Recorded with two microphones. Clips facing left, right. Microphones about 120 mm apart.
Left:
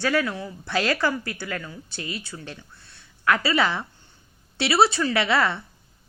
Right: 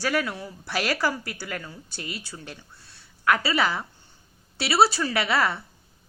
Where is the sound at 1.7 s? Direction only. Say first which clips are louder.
Left 3 dB; 35° right (ahead or behind).